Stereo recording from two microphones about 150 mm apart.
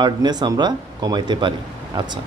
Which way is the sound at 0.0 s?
30° right (ahead or behind).